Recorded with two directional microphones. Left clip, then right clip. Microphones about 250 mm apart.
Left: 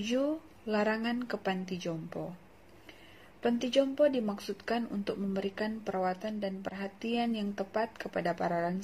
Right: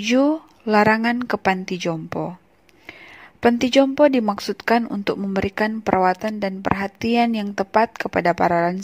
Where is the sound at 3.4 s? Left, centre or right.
Right.